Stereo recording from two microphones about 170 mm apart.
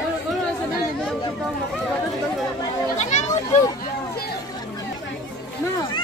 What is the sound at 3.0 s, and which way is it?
Children playing, 45° left (ahead or behind).